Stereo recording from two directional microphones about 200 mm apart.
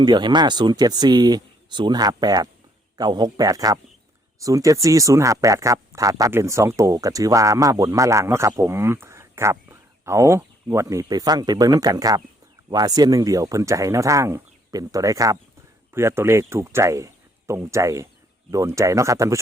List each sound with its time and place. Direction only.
0.0 s speech: 20° right (ahead or behind)